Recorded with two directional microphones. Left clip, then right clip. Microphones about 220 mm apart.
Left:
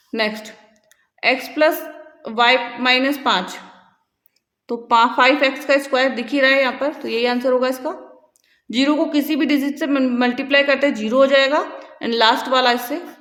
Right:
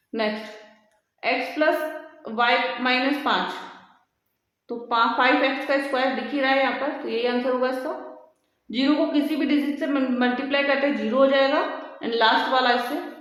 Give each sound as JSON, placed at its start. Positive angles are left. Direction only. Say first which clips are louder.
{"t": 0.1, "sound": "speech", "louder": "left 4 dB", "side_deg": 45}
{"t": 4.6, "sound": "speech", "louder": "left 7 dB", "side_deg": 40}